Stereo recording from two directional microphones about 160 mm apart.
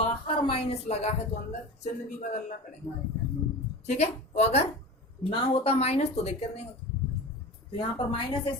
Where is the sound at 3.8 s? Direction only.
45° left (ahead or behind).